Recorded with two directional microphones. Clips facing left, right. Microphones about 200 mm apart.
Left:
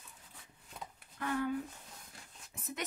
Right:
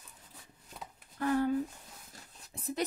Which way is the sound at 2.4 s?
35° right (ahead or behind).